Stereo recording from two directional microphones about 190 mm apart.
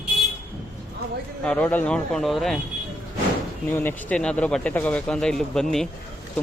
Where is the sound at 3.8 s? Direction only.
5° left (ahead or behind).